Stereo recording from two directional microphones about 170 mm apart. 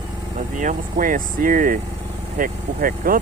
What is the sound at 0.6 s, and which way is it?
Speech, 50° right (ahead or behind).